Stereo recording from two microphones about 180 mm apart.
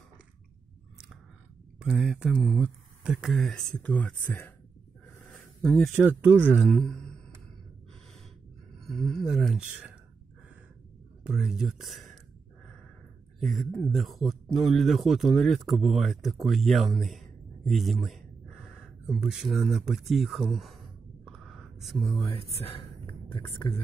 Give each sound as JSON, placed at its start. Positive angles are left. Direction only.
{"t": 1.8, "sound": "speech", "side_deg": -5}
{"t": 5.2, "sound": "a sound", "side_deg": 5}
{"t": 5.9, "sound": "speech", "side_deg": -10}
{"t": 6.7, "sound": "speech", "side_deg": 5}
{"t": 8.7, "sound": "speech", "side_deg": 0}
{"t": 11.2, "sound": "speech", "side_deg": 0}
{"t": 13.4, "sound": "speech", "side_deg": 0}
{"t": 21.3, "sound": "a sound", "side_deg": 0}
{"t": 22.3, "sound": "speech", "side_deg": 30}
{"t": 23.4, "sound": "speech", "side_deg": 15}